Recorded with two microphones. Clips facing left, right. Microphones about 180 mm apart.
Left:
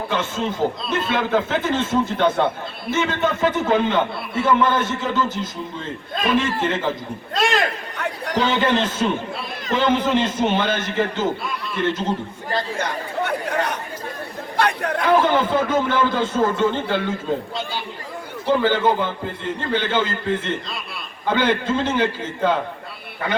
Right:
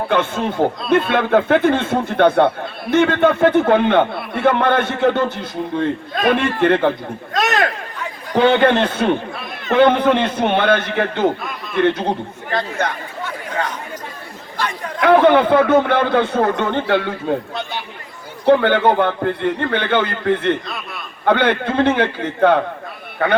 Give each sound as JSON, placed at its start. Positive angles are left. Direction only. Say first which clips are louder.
{"t": 0.1, "sound": "a man's voice", "louder": "right 5 dB", "side_deg": -60}
{"t": 7.9, "sound": "chatter", "louder": "left 1 dB", "side_deg": 70}
{"t": 8.4, "sound": "a man's voice", "louder": "right 6 dB", "side_deg": -60}
{"t": 14.5, "sound": "chatter", "louder": "left 4 dB", "side_deg": 65}
{"t": 15.0, "sound": "a man's voice", "louder": "right 6 dB", "side_deg": -65}